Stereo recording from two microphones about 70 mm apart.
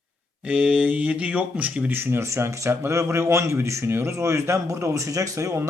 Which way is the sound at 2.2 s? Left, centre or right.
Right.